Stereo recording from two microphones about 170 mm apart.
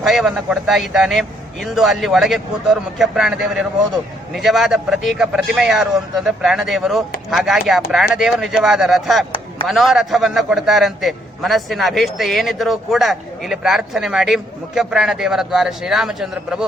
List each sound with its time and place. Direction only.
0.0 s a man's voice: centre (ahead or behind)